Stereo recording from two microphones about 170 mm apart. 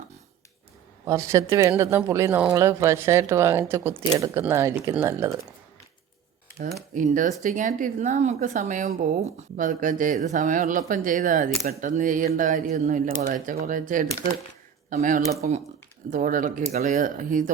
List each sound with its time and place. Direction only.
1.0 s speech: 15° right (ahead or behind)
6.9 s speech: 50° right (ahead or behind)